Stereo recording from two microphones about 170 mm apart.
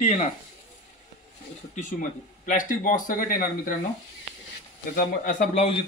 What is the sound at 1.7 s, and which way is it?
Speech, 50° left (ahead or behind).